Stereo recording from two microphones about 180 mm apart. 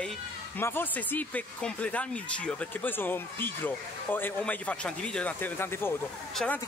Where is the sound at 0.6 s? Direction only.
10° left (ahead or behind).